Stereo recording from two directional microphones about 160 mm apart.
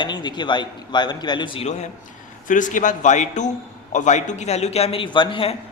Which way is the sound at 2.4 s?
55° left (ahead or behind).